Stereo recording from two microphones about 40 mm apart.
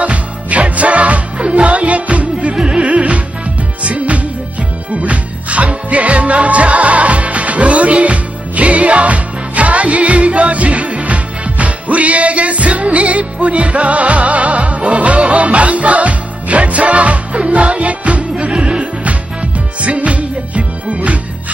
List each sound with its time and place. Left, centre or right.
0.0 s music: right